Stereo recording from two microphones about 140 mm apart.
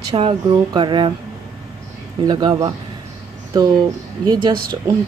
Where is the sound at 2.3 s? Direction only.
30° right (ahead or behind).